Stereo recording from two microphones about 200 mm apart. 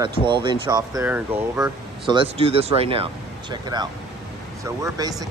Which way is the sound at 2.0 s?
25° right (ahead or behind).